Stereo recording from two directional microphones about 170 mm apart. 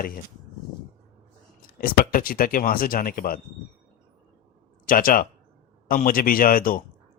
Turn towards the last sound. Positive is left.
turn(degrees=55)  # may be behind; listen again after turning